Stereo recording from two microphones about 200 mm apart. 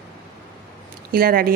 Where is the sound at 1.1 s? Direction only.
45° right (ahead or behind).